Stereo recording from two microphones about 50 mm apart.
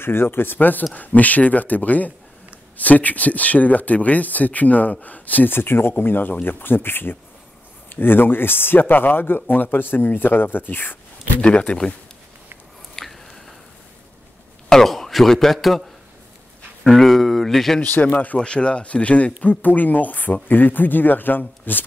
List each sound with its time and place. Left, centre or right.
0.0 s speech: left
11.4 s speech: left
12.9 s a sound: centre
14.7 s a man's voice: centre
16.8 s speech: centre
18.1 s speech: left
18.4 s speech: left